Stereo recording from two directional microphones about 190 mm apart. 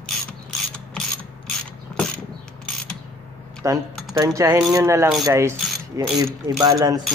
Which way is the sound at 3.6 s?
15° right (ahead or behind).